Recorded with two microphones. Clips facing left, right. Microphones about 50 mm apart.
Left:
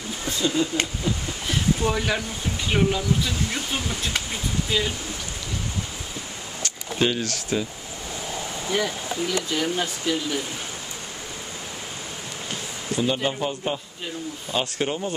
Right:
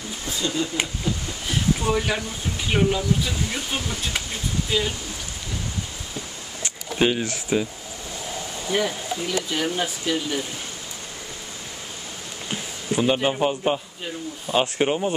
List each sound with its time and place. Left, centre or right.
1.0 s a sound: centre
1.5 s a sound: centre
2.7 s speech: centre
6.6 s speech: centre
8.7 s speech: centre
12.9 s speech: right